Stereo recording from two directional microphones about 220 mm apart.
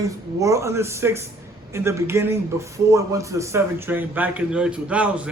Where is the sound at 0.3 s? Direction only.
15° right (ahead or behind).